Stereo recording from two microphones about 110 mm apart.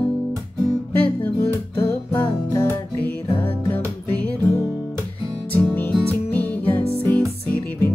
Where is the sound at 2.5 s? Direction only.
20° left (ahead or behind).